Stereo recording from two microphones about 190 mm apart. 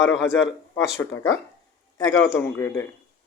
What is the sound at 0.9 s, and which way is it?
Speech, 15° left (ahead or behind).